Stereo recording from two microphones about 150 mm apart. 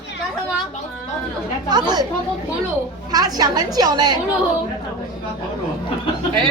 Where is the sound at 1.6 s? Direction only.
30° right (ahead or behind).